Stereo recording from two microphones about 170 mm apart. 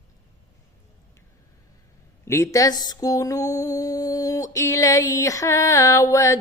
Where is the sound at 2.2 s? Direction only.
15° left (ahead or behind).